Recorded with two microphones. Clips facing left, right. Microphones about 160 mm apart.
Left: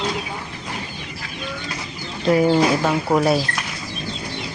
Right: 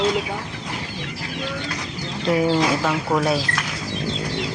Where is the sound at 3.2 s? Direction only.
5° left (ahead or behind).